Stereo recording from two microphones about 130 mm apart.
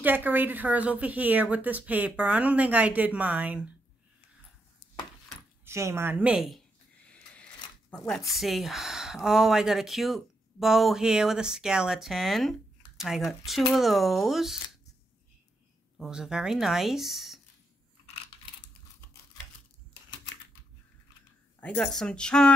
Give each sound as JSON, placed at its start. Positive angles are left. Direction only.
{"t": 0.0, "sound": "speech", "side_deg": -15}
{"t": 5.7, "sound": "speech", "side_deg": -20}
{"t": 7.1, "sound": "a sound", "side_deg": 10}
{"t": 7.9, "sound": "speech", "side_deg": 5}
{"t": 16.0, "sound": "speech", "side_deg": -5}
{"t": 21.5, "sound": "speech", "side_deg": 5}